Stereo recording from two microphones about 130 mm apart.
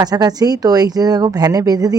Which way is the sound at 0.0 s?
30° right (ahead or behind).